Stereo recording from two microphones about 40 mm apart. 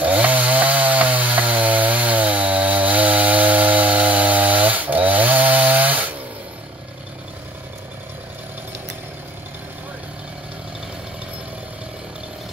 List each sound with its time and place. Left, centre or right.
0.0 s chainsaw: right